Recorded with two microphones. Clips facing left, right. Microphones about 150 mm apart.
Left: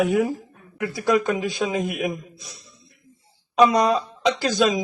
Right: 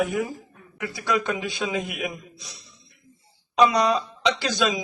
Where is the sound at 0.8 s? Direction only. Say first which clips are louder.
Left 5 dB; 50° left (ahead or behind).